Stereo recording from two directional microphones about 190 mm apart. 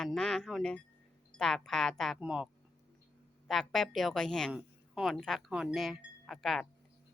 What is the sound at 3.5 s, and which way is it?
Speech, centre (ahead or behind).